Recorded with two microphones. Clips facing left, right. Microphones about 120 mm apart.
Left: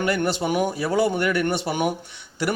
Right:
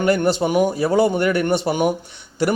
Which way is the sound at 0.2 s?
25° right (ahead or behind).